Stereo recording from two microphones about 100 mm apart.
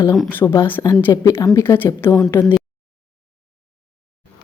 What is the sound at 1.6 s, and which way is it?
Speech, 20° left (ahead or behind).